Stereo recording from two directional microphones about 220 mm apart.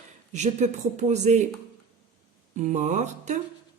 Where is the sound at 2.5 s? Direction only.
30° right (ahead or behind).